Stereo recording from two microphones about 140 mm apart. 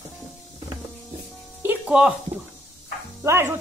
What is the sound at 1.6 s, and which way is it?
Music, 10° right (ahead or behind).